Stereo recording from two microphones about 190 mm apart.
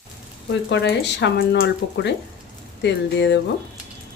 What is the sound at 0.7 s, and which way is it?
Speech, 65° left (ahead or behind).